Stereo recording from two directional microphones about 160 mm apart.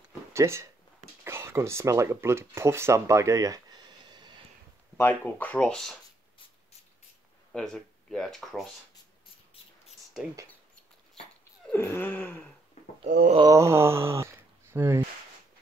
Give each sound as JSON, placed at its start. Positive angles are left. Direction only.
{"t": 0.3, "sound": "speech", "side_deg": -15}
{"t": 4.9, "sound": "speech", "side_deg": 15}
{"t": 7.5, "sound": "speech", "side_deg": 5}
{"t": 11.7, "sound": "speech", "side_deg": 15}
{"t": 13.4, "sound": "speech", "side_deg": -20}